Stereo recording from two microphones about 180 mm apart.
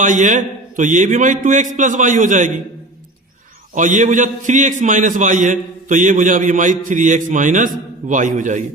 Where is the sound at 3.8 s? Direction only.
45° right (ahead or behind).